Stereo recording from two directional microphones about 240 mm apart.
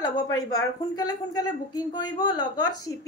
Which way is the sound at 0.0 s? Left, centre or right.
Centre.